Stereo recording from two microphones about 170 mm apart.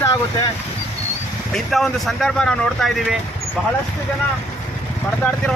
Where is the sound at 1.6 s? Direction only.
Centre (ahead or behind).